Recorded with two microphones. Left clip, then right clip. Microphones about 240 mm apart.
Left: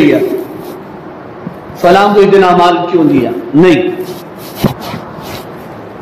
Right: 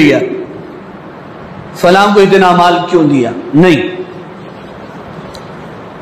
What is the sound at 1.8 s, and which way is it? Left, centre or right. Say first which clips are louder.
A man's voice: even; right.